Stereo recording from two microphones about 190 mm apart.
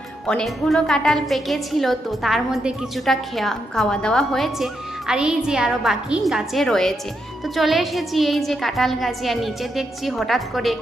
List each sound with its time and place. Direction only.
0.3 s a woman's voice: 5° left (ahead or behind)